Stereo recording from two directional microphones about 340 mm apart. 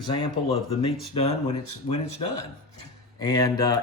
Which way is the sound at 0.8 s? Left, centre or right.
Centre.